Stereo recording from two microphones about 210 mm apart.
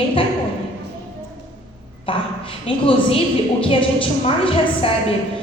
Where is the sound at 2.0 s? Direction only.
25° left (ahead or behind).